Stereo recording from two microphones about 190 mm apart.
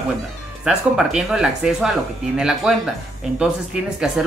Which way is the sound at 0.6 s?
5° right (ahead or behind).